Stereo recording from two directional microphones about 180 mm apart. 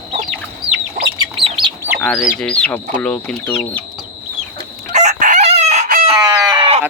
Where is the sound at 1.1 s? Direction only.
25° right (ahead or behind).